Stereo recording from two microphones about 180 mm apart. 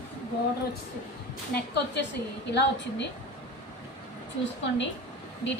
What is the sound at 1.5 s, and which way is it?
Speech, 70° left (ahead or behind).